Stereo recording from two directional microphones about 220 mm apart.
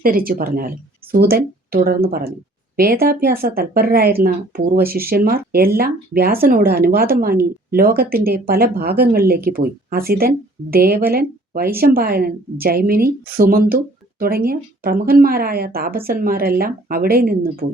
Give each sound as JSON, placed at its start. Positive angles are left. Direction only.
{"t": 0.0, "sound": "speech", "side_deg": -40}